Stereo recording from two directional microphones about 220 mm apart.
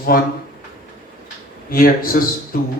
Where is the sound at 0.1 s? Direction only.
40° left (ahead or behind).